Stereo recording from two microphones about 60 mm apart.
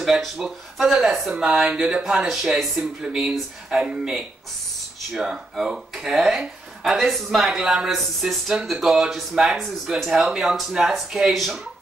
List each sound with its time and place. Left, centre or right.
0.0 s speech: centre
1.5 s speech: right
1.8 s speech: centre
5.1 s speech: centre